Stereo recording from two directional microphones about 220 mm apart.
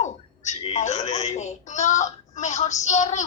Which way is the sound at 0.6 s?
30° left (ahead or behind).